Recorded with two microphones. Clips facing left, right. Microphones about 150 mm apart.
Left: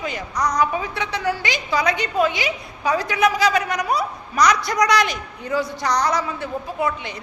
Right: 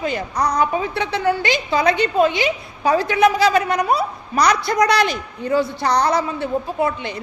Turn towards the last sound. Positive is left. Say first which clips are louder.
# right 3 dB
turn(degrees=-30)  # may be behind; listen again after turning